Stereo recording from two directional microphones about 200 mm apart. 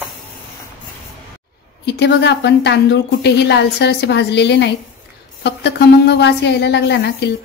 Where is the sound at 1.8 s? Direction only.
60° left (ahead or behind).